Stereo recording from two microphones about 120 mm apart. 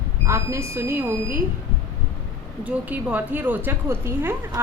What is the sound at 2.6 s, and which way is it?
A woman's voice, 15° right (ahead or behind).